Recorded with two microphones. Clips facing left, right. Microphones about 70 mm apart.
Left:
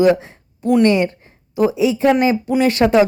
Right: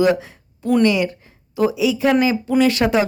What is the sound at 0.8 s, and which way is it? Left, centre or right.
A woman's voice, left.